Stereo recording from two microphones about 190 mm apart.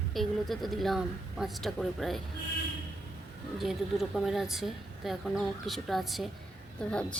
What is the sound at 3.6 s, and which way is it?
A woman's voice, centre (ahead or behind).